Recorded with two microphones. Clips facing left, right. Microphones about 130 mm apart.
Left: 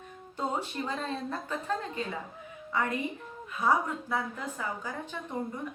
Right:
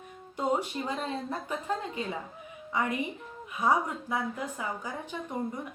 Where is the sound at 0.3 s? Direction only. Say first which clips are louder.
Right 3 dB; 15° right (ahead or behind).